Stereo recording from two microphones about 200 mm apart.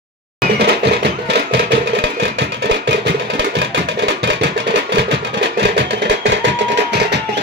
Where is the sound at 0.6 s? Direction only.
55° right (ahead or behind).